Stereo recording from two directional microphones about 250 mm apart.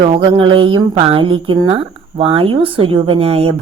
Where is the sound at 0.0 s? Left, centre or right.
Centre.